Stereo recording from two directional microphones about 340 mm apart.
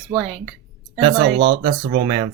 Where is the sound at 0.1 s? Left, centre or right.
Centre.